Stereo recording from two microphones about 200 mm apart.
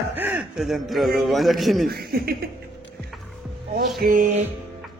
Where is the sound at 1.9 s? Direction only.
50° right (ahead or behind).